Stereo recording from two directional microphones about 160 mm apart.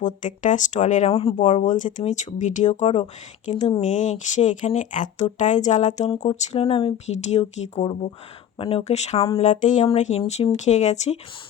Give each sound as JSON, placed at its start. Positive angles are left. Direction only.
{"t": 0.0, "sound": "speech", "side_deg": 50}